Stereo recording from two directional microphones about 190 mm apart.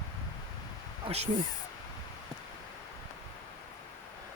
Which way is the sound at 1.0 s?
35° right (ahead or behind).